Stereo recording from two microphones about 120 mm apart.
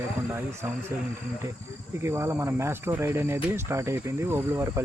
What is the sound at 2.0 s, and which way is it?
Speech, 20° right (ahead or behind).